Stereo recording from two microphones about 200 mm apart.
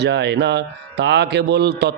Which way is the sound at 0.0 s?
60° right (ahead or behind).